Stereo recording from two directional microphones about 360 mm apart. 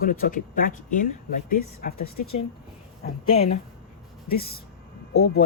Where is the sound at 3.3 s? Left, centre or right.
Centre.